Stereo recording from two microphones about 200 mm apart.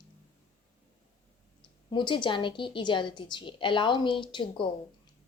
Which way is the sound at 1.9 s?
25° left (ahead or behind).